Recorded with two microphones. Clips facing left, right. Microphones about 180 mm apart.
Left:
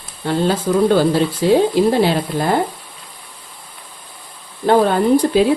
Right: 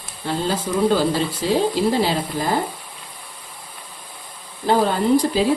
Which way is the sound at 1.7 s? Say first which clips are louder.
Left 5 dB; 60° left (ahead or behind).